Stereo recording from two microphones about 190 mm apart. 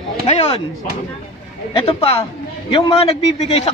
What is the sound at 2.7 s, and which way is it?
Speech, 25° left (ahead or behind).